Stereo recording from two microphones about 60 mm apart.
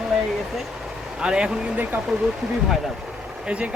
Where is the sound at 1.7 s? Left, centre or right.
Right.